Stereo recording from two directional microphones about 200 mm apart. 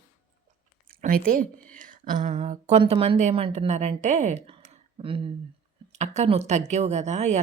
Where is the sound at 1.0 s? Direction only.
45° right (ahead or behind).